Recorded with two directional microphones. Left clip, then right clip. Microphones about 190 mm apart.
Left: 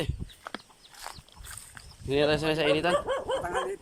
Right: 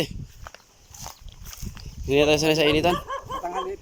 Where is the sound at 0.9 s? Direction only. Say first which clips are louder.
Right 2 dB; 20° right (ahead or behind).